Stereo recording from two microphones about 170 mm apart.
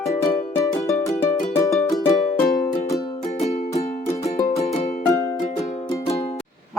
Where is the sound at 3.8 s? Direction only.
40° left (ahead or behind).